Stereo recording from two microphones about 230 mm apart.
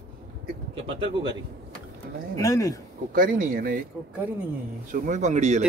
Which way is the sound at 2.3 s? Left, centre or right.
Centre.